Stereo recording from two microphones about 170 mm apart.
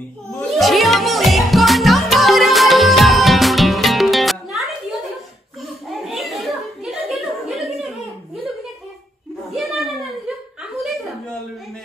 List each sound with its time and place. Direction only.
0.4 s music: centre (ahead or behind)
5.6 s a sound: centre (ahead or behind)
9.6 s chuckle: centre (ahead or behind)